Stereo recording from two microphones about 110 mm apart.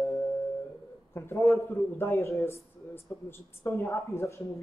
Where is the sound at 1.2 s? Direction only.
25° left (ahead or behind).